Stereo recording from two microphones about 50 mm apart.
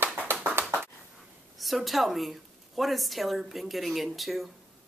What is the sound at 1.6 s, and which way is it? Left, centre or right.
A woman's voice, centre.